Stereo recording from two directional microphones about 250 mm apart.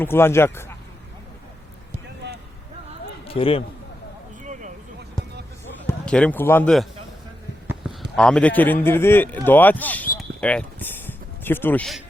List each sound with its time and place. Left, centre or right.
0.0 s a man's voice: centre
3.2 s speech: left
6.1 s a man's voice: centre
8.1 s a man's voice: centre
10.2 s a sound: centre